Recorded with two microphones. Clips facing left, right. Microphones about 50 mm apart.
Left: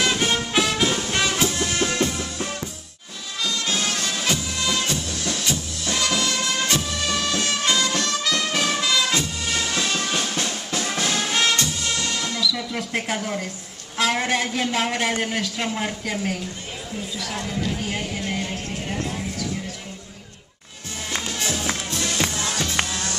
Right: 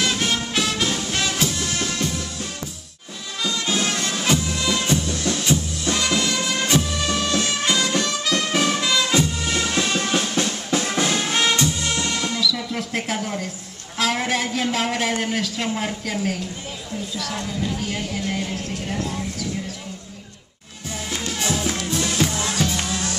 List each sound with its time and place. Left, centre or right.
0.0 s music: centre
3.4 s music: centre
4.7 s music: centre
5.0 s music: centre
10.2 s music: centre
11.9 s music: centre
12.4 s a sound: centre
17.2 s speech: centre
21.1 s music: centre